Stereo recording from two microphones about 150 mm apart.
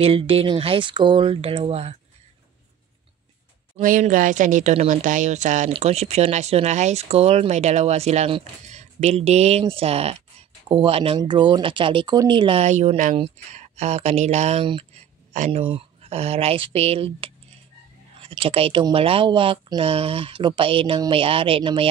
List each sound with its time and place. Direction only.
0.0 s speech: 40° right (ahead or behind)
4.0 s speech: 60° right (ahead or behind); by 12.6 s 35° right (ahead or behind)
12.6 s speech: 50° right (ahead or behind)
15.5 s speech: 35° right (ahead or behind)